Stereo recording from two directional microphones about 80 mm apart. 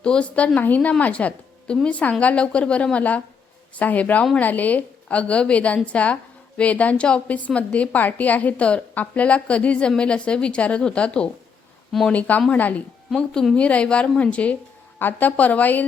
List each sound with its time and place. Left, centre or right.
0.0 s a woman's voice: centre
11.9 s speech: centre
12.5 s a woman's voice: centre
13.1 s a woman's voice: centre